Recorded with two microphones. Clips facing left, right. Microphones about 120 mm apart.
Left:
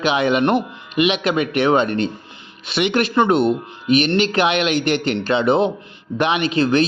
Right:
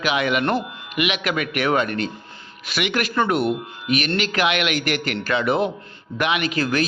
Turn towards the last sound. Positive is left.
turn(degrees=25)  # may be behind; listen again after turning